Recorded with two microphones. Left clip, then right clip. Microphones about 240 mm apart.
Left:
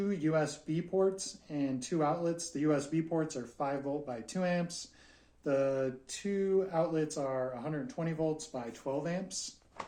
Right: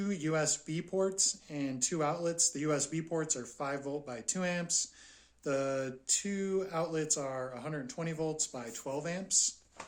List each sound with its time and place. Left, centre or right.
0.0 s speech: right